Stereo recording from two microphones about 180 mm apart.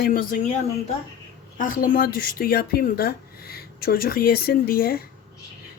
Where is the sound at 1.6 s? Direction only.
50° left (ahead or behind).